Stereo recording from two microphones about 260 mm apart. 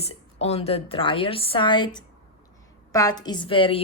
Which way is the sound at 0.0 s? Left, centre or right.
Left.